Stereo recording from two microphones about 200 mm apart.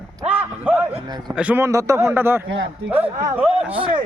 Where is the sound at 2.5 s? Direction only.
70° right (ahead or behind).